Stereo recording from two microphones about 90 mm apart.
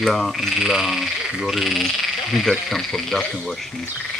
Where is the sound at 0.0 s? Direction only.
5° left (ahead or behind).